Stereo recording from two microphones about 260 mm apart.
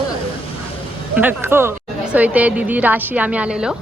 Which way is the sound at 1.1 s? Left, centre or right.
Centre.